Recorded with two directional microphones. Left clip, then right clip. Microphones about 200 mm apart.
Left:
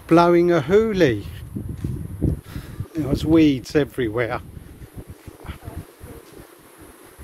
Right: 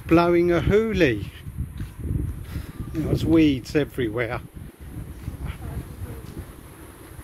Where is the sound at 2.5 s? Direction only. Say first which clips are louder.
Left 2 dB; 20° left (ahead or behind).